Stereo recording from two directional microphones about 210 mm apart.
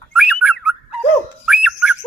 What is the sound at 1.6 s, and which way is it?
Whistling, 5° right (ahead or behind).